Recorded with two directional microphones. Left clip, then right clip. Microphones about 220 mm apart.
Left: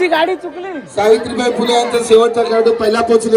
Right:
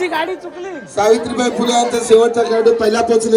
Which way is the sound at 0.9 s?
50° right (ahead or behind).